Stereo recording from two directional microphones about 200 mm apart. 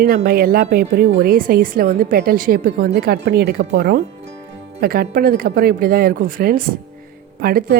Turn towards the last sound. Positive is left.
turn(degrees=-50)  # may be behind; listen again after turning